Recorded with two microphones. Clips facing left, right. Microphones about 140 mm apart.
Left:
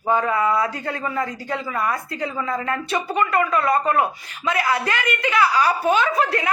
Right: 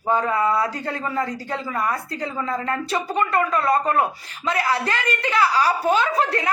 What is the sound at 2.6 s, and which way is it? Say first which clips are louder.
A woman's voice: even; 35° right (ahead or behind).